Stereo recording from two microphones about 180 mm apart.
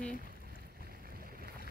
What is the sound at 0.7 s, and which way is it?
Boat, 55° right (ahead or behind).